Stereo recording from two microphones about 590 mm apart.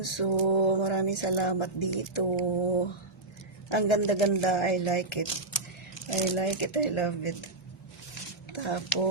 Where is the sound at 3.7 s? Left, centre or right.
Left.